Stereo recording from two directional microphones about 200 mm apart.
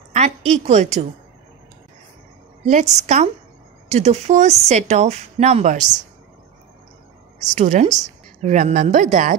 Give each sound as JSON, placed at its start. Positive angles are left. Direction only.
{"t": 0.1, "sound": "a woman's voice", "side_deg": -35}
{"t": 2.6, "sound": "a woman's voice", "side_deg": -35}
{"t": 7.5, "sound": "a woman's voice", "side_deg": -35}